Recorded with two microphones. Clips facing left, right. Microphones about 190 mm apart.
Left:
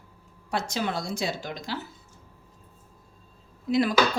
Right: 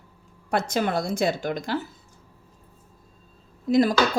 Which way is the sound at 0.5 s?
55° right (ahead or behind).